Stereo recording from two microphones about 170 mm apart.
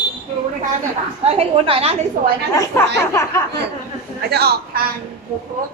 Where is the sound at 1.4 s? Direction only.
35° right (ahead or behind).